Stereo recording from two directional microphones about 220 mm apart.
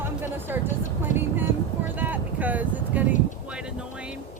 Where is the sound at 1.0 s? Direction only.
10° right (ahead or behind).